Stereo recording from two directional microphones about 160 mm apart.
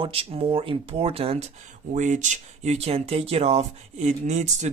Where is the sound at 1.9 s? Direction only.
50° right (ahead or behind).